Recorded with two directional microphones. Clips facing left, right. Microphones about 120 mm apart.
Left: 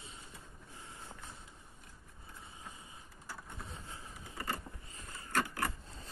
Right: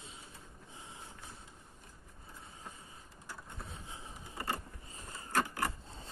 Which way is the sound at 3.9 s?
25° right (ahead or behind).